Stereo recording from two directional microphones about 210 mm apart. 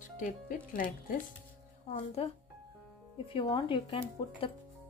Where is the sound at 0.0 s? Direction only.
40° left (ahead or behind).